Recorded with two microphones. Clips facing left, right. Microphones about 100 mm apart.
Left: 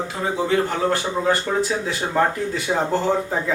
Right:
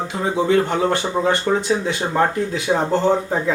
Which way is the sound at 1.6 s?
Centre (ahead or behind).